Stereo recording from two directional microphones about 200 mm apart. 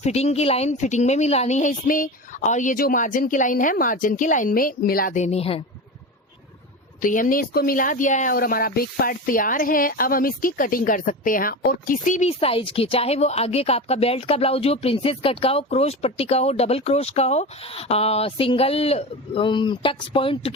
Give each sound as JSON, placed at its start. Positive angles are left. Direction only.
{"t": 0.0, "sound": "speech", "side_deg": 35}
{"t": 7.0, "sound": "speech", "side_deg": 40}